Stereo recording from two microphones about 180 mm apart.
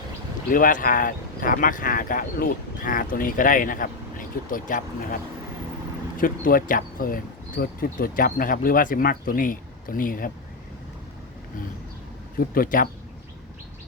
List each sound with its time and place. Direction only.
0.5 s speech: 50° left (ahead or behind)
12.4 s speech: 50° left (ahead or behind)